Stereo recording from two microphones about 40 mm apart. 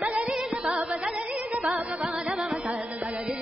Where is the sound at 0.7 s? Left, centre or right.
Right.